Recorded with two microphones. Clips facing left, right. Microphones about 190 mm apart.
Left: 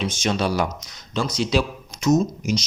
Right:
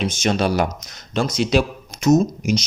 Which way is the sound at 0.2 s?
55° right (ahead or behind).